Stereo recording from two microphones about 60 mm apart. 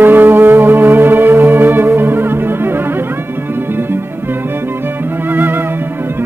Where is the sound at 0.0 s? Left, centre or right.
Right.